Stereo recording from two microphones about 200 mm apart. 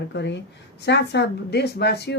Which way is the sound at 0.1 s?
60° left (ahead or behind).